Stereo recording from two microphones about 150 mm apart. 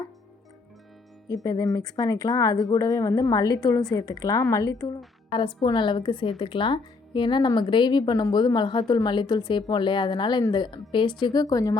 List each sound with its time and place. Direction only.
1.5 s speech: 25° left (ahead or behind)
5.3 s speech: 30° left (ahead or behind)